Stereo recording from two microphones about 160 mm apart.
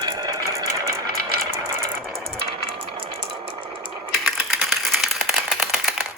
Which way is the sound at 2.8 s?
35° right (ahead or behind).